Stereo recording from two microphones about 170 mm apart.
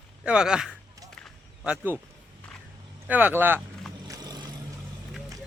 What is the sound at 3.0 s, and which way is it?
Speech, 10° right (ahead or behind).